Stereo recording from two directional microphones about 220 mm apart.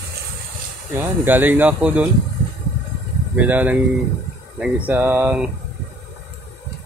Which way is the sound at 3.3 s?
5° right (ahead or behind).